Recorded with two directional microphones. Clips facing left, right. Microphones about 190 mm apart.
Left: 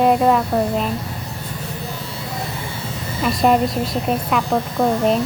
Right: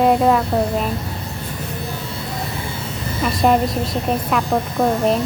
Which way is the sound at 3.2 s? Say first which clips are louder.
Even; centre (ahead or behind).